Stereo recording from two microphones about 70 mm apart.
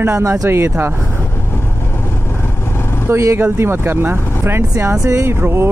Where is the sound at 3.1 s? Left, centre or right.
Right.